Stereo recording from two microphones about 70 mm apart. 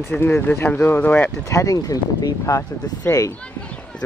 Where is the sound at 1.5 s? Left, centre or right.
Left.